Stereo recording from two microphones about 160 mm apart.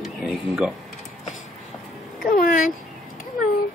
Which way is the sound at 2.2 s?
60° left (ahead or behind).